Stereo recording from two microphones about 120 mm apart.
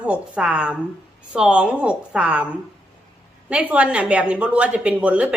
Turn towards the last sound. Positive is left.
turn(degrees=-10)  # may be behind; listen again after turning